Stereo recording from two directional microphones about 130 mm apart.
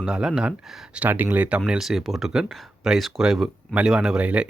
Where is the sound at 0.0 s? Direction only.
5° right (ahead or behind).